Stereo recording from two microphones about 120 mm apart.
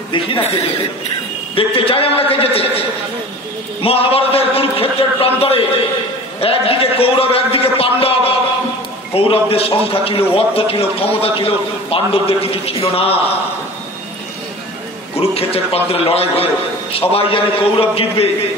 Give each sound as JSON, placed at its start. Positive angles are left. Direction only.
{"t": 0.1, "sound": "a man's voice", "side_deg": 45}
{"t": 1.5, "sound": "a man's voice", "side_deg": 50}
{"t": 3.8, "sound": "a man's voice", "side_deg": 50}
{"t": 15.1, "sound": "a man's voice", "side_deg": 55}